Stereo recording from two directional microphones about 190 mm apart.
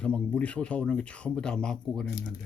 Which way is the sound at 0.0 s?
5° left (ahead or behind).